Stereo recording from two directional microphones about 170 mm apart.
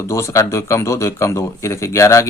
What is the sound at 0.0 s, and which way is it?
Speech, 15° left (ahead or behind).